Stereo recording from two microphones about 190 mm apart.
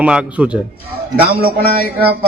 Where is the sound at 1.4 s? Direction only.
50° right (ahead or behind).